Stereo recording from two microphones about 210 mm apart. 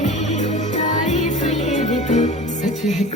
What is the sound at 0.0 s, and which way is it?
Music, 30° left (ahead or behind).